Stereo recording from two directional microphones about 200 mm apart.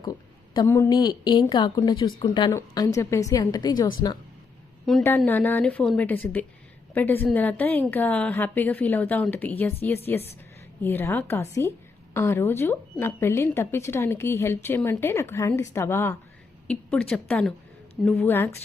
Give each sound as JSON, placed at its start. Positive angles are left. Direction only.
{"t": 0.0, "sound": "a woman's voice", "side_deg": 20}